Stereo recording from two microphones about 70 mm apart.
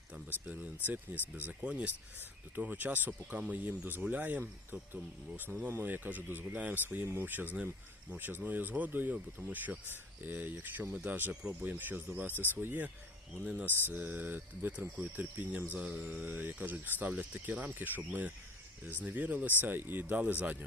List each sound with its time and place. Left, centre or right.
0.3 s speech: right
3.1 s speech: centre
5.6 s speech: right
13.4 s speech: centre
13.7 s speech: right